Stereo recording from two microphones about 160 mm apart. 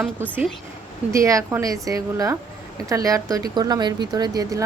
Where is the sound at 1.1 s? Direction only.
20° right (ahead or behind).